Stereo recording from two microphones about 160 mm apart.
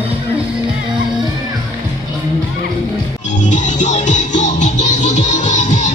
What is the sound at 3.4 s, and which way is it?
Music, 50° left (ahead or behind).